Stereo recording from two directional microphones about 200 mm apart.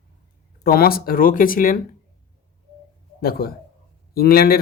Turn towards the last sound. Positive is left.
turn(degrees=50)  # may be behind; listen again after turning